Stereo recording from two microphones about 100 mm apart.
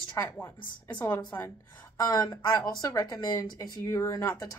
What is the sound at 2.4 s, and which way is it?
Speech, 35° left (ahead or behind).